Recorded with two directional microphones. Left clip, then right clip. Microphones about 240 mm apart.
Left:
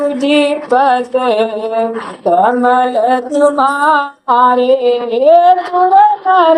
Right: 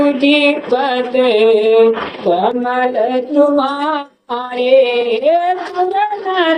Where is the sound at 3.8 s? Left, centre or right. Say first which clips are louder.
Left 7 dB; left.